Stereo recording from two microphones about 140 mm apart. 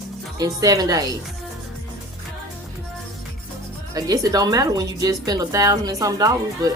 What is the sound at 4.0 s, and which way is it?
Speech, 25° right (ahead or behind).